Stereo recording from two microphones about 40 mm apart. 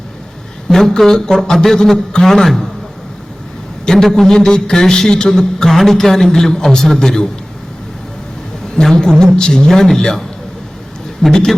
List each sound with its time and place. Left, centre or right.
0.7 s a man's voice: centre
3.8 s a man's voice: centre
8.7 s a man's voice: centre
11.3 s a man's voice: centre